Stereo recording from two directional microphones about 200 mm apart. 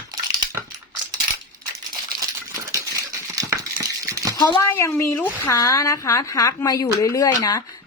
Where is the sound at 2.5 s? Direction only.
15° right (ahead or behind).